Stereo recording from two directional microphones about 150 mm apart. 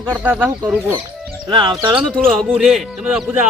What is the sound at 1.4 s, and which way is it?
Speech, 30° right (ahead or behind).